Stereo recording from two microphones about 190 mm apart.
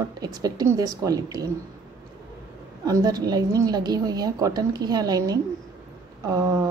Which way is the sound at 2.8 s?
20° right (ahead or behind).